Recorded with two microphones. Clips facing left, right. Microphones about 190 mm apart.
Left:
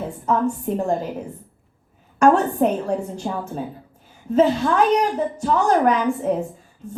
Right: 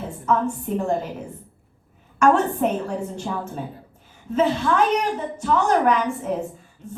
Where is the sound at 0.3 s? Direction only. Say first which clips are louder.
Left 1 dB; 40° left (ahead or behind).